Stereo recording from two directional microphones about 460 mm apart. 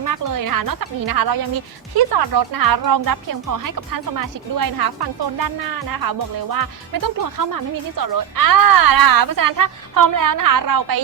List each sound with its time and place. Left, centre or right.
0.0 s a woman's voice: right